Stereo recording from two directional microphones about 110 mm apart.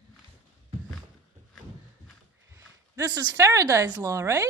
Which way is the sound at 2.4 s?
30° right (ahead or behind).